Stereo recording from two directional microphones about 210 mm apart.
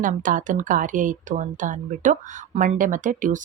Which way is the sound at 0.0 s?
40° right (ahead or behind).